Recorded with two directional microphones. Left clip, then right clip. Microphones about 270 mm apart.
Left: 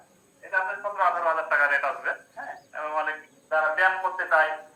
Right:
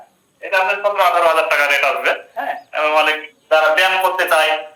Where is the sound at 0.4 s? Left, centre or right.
Right.